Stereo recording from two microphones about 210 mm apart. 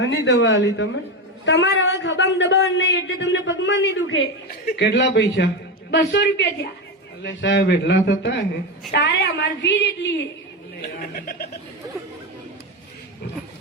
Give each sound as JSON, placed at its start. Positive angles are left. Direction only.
{"t": 0.0, "sound": "speech", "side_deg": 55}
{"t": 10.8, "sound": "speech", "side_deg": 45}